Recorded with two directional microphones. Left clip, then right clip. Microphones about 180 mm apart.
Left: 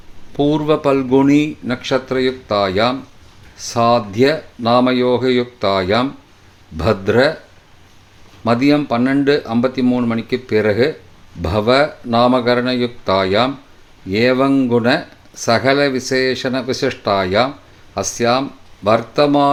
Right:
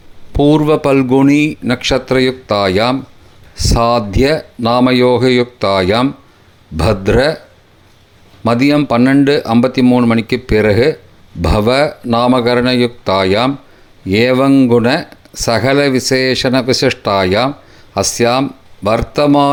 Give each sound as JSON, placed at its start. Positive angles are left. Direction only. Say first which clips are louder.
{"t": 0.3, "sound": "speech", "louder": "right 5 dB", "side_deg": -35}
{"t": 8.4, "sound": "speech", "louder": "right 3 dB", "side_deg": -35}